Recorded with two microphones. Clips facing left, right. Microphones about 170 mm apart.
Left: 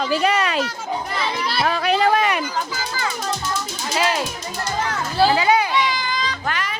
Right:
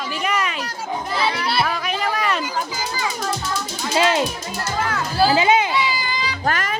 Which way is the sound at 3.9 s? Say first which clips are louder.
Right 3 dB; 25° right (ahead or behind).